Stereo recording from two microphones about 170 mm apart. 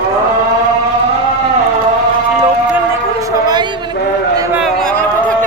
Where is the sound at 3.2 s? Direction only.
25° right (ahead or behind).